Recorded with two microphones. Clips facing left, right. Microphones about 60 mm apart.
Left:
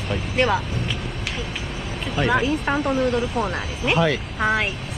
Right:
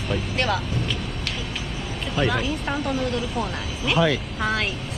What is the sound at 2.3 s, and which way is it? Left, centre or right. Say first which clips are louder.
Speech: left 5 dB; centre.